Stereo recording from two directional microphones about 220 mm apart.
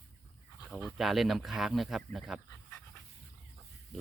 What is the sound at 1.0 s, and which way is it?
Speech, centre (ahead or behind).